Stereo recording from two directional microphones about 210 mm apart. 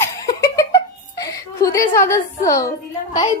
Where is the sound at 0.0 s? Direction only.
15° left (ahead or behind).